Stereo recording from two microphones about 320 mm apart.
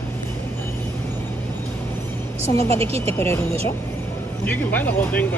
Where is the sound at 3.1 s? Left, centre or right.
Centre.